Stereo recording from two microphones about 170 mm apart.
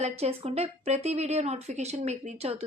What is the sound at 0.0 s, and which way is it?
A woman's voice, 40° right (ahead or behind).